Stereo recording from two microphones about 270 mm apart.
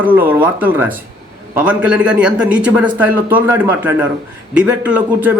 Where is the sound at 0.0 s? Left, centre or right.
Centre.